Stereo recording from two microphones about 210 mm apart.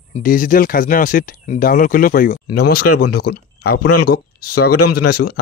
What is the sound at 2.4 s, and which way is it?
Speech, 90° left.